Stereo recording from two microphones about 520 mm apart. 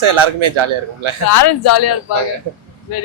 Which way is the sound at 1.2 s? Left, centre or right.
Left.